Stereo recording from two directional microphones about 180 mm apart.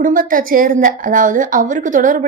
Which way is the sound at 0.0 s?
50° right (ahead or behind).